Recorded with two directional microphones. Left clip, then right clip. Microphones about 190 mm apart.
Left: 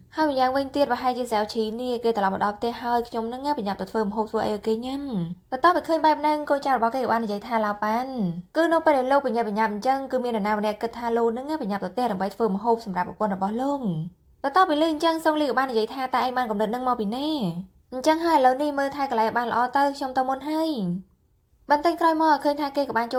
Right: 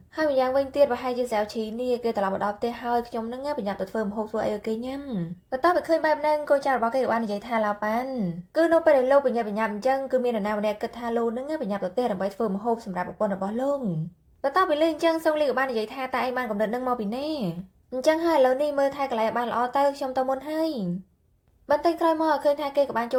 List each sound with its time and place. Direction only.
0.2 s a woman's voice: 20° left (ahead or behind)